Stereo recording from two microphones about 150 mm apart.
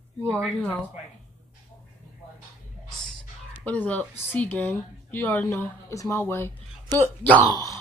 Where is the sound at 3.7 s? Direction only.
10° left (ahead or behind).